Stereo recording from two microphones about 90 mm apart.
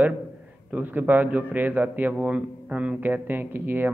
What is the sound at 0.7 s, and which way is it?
A man's voice, 15° right (ahead or behind).